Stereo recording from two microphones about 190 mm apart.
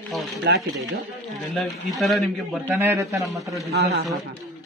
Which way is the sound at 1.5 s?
Centre (ahead or behind).